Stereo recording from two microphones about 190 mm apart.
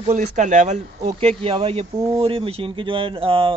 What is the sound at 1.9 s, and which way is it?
Speech, 15° right (ahead or behind).